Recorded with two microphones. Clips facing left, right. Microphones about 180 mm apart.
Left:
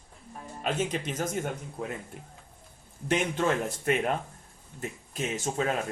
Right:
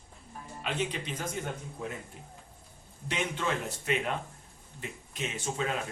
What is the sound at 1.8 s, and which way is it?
Speech, 60° left (ahead or behind).